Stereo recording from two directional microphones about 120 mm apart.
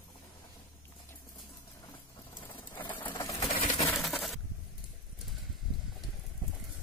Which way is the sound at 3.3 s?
60° left (ahead or behind).